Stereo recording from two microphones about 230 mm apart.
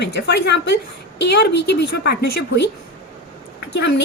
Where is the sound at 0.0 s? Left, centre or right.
Left.